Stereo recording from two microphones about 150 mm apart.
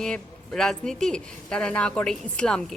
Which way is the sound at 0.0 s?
5° left (ahead or behind).